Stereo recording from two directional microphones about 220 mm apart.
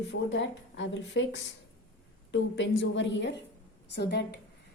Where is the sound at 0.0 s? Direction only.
55° left (ahead or behind).